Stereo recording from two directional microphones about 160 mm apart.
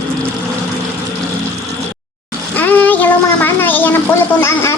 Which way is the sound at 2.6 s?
10° left (ahead or behind).